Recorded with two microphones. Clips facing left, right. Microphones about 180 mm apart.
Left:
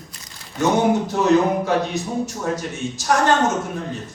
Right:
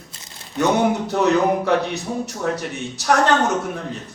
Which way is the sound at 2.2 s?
65° right (ahead or behind).